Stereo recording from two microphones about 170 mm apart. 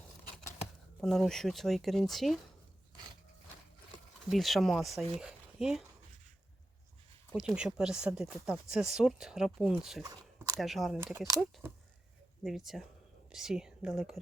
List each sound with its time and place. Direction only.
1.0 s speech: centre (ahead or behind)
4.3 s speech: centre (ahead or behind)
5.2 s a sound: 5° right (ahead or behind)
7.3 s speech: 5° right (ahead or behind)
10.0 s a sound: 20° right (ahead or behind)
10.6 s speech: centre (ahead or behind)
10.9 s speech: 10° right (ahead or behind)
12.4 s speech: centre (ahead or behind)